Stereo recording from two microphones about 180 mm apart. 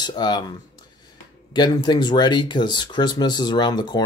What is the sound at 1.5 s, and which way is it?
Speech, 25° left (ahead or behind).